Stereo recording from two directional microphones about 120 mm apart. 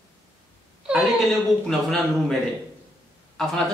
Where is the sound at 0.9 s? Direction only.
10° right (ahead or behind).